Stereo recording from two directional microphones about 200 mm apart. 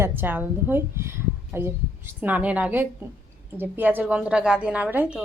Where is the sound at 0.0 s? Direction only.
10° right (ahead or behind).